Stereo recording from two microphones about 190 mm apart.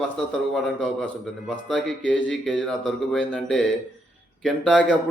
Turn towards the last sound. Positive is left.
turn(degrees=5)  # may be behind; listen again after turning